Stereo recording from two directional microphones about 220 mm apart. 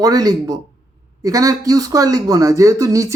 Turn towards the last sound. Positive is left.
turn(degrees=-15)  # may be behind; listen again after turning